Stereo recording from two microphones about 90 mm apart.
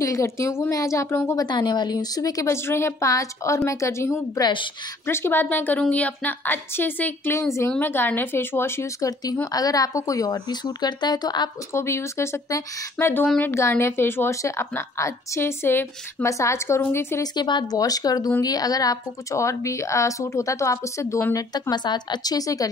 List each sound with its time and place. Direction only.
0.0 s speech: 35° left (ahead or behind)
1.3 s speech: 50° left (ahead or behind); by 4.2 s 30° left (ahead or behind)
4.4 s a woman's voice: 60° left (ahead or behind)
5.0 s a woman's voice: 25° left (ahead or behind); by 11.5 s 50° left (ahead or behind)
11.7 s speech: 30° left (ahead or behind)
13.0 s a woman's voice: 20° left (ahead or behind)
17.2 s speech: 55° left (ahead or behind)